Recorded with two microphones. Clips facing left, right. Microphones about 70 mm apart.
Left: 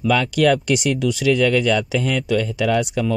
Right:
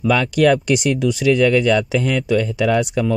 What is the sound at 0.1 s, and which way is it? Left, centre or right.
Speech, right.